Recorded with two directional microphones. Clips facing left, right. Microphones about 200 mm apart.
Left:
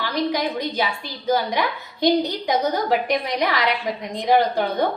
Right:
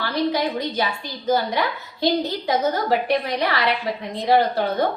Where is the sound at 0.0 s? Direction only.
15° left (ahead or behind).